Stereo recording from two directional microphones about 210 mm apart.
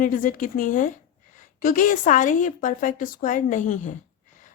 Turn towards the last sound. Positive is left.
turn(degrees=35)  # may be behind; listen again after turning